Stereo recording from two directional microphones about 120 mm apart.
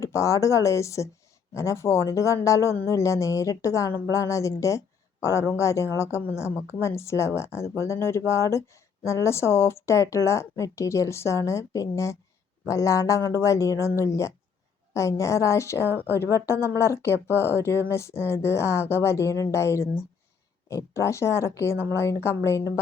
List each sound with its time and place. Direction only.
0.0 s speech: 25° left (ahead or behind)